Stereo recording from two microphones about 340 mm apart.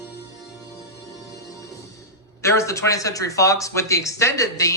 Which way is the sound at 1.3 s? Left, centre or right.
Centre.